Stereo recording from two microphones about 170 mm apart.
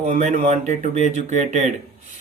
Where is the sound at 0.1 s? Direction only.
45° right (ahead or behind).